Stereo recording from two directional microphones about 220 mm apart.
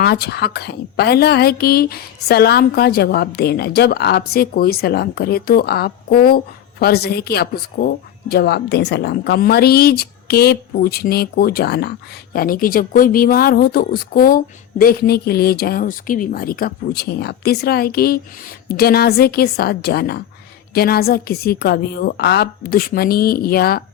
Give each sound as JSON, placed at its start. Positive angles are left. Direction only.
{"t": 0.0, "sound": "speech", "side_deg": 45}